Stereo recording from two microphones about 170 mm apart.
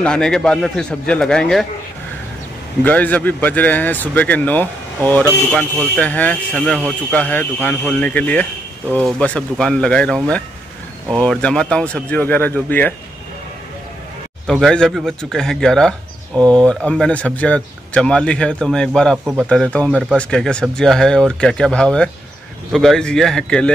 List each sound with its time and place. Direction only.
0.0 s speech: 5° left (ahead or behind)
2.8 s speech: 10° left (ahead or behind)
14.5 s speech: 5° left (ahead or behind)